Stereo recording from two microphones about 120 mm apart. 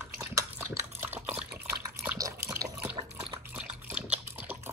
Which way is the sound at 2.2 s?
25° right (ahead or behind).